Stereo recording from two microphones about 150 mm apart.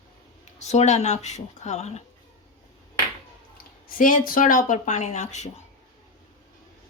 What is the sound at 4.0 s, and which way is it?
Speech, 65° left (ahead or behind).